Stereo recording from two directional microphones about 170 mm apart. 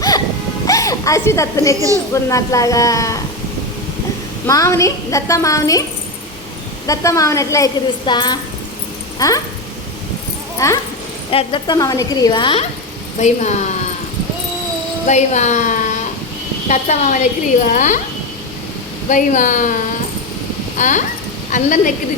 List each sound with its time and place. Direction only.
0.7 s a woman's voice: 20° left (ahead or behind)
4.4 s a woman's voice: 20° left (ahead or behind)
6.8 s a woman's voice: 20° left (ahead or behind)
10.6 s a woman's voice: 20° left (ahead or behind)
11.3 s a woman's voice: 30° left (ahead or behind)
13.1 s speech: 40° left (ahead or behind)
15.0 s speech: 45° left (ahead or behind)
19.0 s speech: 50° left (ahead or behind)